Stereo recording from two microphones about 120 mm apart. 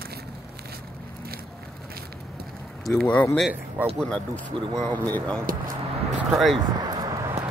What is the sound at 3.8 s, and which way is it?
Speech, 15° right (ahead or behind).